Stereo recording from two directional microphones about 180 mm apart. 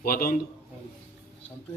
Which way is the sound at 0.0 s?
55° left (ahead or behind).